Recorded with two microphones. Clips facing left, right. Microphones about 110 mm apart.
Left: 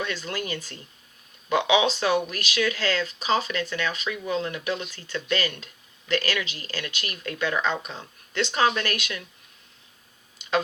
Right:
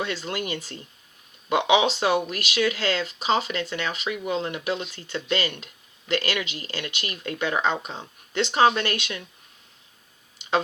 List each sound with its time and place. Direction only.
0.0 s speech: 25° right (ahead or behind)